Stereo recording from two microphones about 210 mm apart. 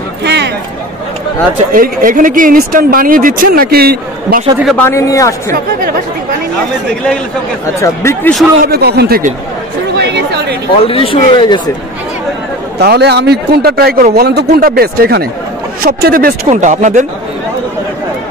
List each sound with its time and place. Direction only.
0.2 s a sound: 55° right (ahead or behind)
1.7 s speech: 40° right (ahead or behind)
4.6 s speech: 10° left (ahead or behind)
7.8 s speech: 15° left (ahead or behind)
8.6 s a man's voice: 50° right (ahead or behind)
9.9 s chatter: 50° right (ahead or behind)
10.8 s speech: 25° left (ahead or behind)
12.7 s a man's voice: 50° right (ahead or behind); by 17.0 s 35° right (ahead or behind)